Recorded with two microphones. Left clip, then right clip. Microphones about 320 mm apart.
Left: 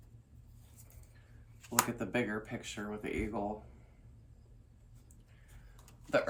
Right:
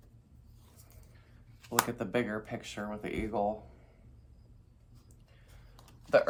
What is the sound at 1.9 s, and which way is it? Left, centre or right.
Speech, right.